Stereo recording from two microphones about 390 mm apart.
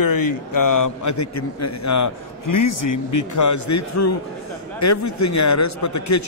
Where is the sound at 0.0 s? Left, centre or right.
Left.